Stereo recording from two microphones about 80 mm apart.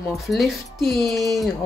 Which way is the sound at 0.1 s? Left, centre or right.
Centre.